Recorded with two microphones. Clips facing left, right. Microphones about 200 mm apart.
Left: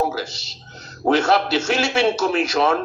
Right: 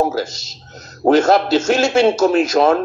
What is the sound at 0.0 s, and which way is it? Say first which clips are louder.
A man's voice: right 5 dB; 45° right (ahead or behind).